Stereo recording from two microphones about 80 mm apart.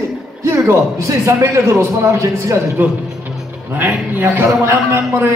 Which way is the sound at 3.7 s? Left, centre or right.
Right.